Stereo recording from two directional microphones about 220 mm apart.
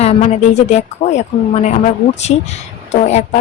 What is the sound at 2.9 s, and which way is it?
Speech, 30° left (ahead or behind).